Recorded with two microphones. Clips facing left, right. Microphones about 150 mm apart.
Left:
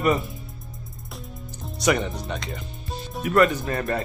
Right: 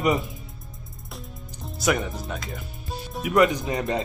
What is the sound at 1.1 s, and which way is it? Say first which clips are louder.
Music: left 1 dB; centre (ahead or behind).